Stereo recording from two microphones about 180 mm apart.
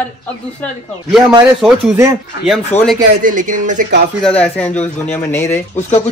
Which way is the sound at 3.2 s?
45° right (ahead or behind).